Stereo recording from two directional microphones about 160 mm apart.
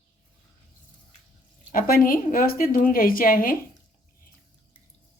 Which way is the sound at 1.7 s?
65° left (ahead or behind).